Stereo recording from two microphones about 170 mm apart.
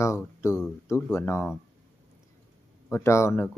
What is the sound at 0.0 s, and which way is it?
Speech, 15° left (ahead or behind).